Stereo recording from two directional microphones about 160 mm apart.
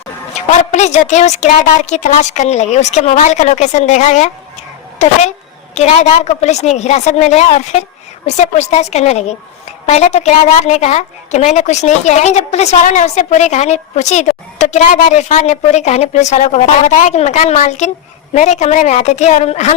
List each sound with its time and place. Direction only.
0.3 s a woman's voice: 45° left (ahead or behind)